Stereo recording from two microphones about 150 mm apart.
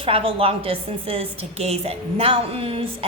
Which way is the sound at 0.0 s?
40° right (ahead or behind).